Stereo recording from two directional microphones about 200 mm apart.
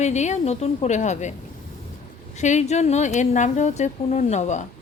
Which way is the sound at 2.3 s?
35° left (ahead or behind).